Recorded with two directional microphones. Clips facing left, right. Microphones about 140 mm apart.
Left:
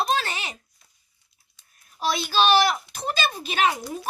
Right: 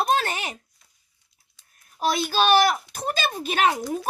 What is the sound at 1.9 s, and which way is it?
A woman's voice, 45° right (ahead or behind).